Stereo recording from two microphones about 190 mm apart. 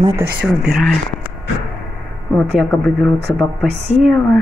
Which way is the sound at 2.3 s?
5° left (ahead or behind).